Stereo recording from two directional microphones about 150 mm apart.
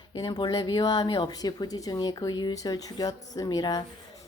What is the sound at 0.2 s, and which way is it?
A woman's voice, 30° left (ahead or behind).